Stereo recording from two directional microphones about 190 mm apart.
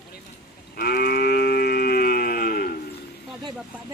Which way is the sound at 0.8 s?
50° left (ahead or behind).